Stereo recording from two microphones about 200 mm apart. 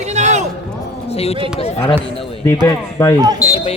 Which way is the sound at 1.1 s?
30° left (ahead or behind).